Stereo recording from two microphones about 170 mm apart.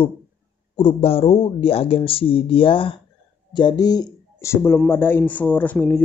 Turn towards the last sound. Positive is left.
turn(degrees=10)  # may be behind; listen again after turning